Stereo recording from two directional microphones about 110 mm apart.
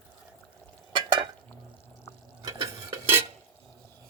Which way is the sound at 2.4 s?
30° right (ahead or behind).